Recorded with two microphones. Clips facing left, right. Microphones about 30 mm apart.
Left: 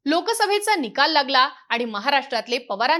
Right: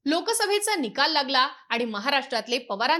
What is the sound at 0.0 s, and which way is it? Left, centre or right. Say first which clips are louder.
A woman's voice: left 4 dB; centre.